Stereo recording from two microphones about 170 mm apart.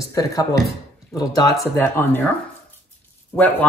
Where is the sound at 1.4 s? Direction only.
15° left (ahead or behind).